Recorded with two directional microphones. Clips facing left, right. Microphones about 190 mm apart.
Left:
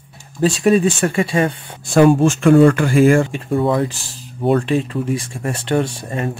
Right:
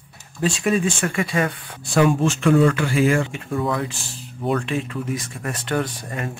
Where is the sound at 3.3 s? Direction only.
30° left (ahead or behind).